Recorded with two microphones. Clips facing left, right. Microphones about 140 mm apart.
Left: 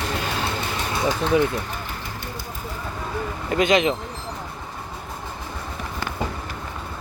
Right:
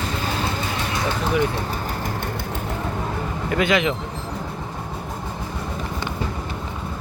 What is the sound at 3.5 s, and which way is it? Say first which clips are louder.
Speech: left 1 dB; 20° left (ahead or behind).